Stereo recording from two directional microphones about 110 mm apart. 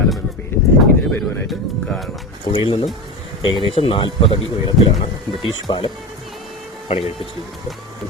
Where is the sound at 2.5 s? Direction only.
50° left (ahead or behind).